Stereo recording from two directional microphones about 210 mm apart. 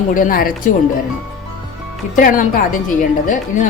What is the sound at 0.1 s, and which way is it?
Speech, 40° left (ahead or behind).